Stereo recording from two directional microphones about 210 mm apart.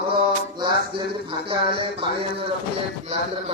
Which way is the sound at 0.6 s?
20° right (ahead or behind).